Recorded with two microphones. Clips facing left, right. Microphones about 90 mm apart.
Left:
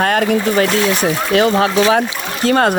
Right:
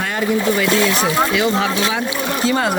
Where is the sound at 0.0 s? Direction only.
65° left (ahead or behind).